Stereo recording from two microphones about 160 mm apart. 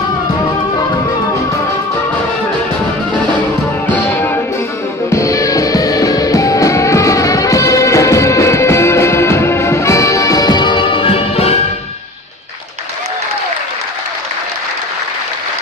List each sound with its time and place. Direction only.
3.9 s music: 15° left (ahead or behind); by 11.6 s 40° left (ahead or behind)